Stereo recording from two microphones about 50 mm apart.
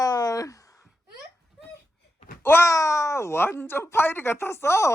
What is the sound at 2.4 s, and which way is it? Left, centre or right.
Speech, left.